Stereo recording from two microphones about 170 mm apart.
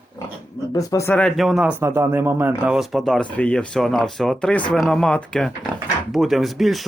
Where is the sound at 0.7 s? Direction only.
20° left (ahead or behind).